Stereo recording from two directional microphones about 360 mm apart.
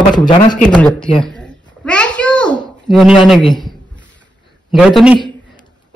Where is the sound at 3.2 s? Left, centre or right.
Centre.